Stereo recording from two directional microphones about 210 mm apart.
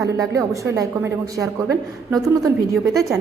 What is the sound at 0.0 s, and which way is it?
Speech, 15° right (ahead or behind).